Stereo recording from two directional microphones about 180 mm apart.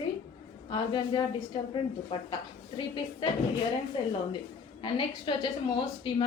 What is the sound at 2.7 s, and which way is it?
Speech, 25° left (ahead or behind).